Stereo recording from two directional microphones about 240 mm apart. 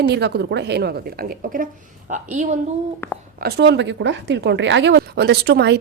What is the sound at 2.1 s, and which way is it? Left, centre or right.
Speech, right.